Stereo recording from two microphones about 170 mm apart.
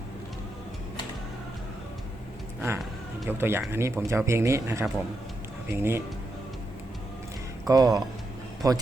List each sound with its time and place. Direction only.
3.2 s speech: 15° right (ahead or behind)
7.7 s speech: 20° right (ahead or behind)